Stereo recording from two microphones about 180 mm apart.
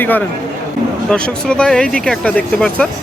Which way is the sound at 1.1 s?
5° left (ahead or behind).